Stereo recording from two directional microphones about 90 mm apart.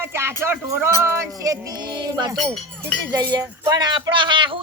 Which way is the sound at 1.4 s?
40° right (ahead or behind).